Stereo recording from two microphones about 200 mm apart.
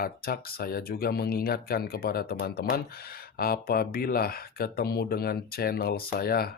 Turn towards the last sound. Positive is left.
turn(degrees=50)  # may be behind; listen again after turning